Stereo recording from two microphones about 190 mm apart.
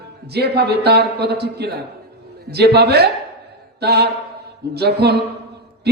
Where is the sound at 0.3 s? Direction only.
60° right (ahead or behind).